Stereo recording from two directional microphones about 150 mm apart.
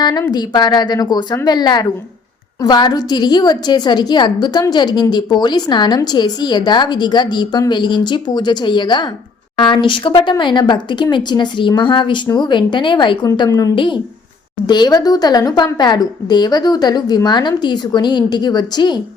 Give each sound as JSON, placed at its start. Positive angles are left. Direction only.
{"t": 0.0, "sound": "a woman's voice", "side_deg": 25}